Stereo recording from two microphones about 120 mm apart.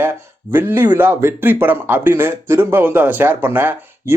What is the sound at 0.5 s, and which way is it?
Speech, 20° right (ahead or behind).